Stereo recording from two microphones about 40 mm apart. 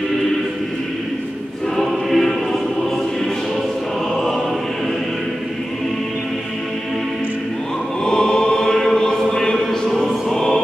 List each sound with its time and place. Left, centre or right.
1.8 s choir: centre
8.0 s choir: centre
10.0 s music: centre